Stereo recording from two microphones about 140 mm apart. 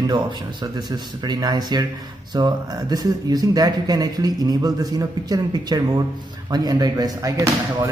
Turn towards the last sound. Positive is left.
turn(degrees=-25)  # may be behind; listen again after turning